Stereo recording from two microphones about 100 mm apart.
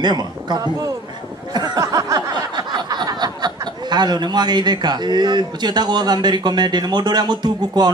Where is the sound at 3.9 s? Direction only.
45° right (ahead or behind).